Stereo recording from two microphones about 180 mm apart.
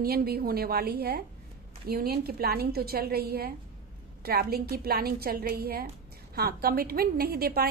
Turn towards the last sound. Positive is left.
turn(degrees=-55)  # may be behind; listen again after turning